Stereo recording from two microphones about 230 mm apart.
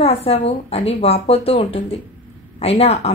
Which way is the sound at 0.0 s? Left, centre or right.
Left.